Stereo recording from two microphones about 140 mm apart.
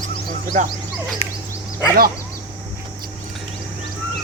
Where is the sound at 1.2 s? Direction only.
45° left (ahead or behind).